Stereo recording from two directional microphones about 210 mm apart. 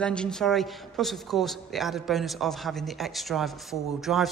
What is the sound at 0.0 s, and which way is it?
A man's voice, 5° left (ahead or behind).